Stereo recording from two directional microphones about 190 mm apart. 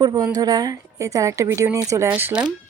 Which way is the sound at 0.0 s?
20° right (ahead or behind).